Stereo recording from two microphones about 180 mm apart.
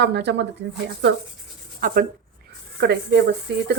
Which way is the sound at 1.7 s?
50° right (ahead or behind).